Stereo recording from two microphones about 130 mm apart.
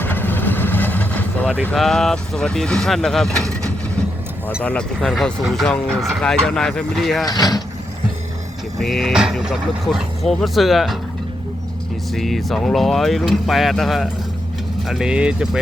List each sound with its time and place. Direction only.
0.0 s vehicle: 15° left (ahead or behind)
1.7 s speech: 5° left (ahead or behind)
4.6 s speech: 10° left (ahead or behind)
7.3 s speech: 30° left (ahead or behind)
8.8 s speech: centre (ahead or behind)
12.1 s speech: centre (ahead or behind)